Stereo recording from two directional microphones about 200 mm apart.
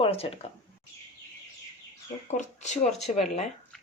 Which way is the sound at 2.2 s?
35° left (ahead or behind).